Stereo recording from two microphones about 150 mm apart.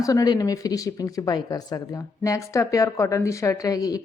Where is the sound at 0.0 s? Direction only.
25° left (ahead or behind).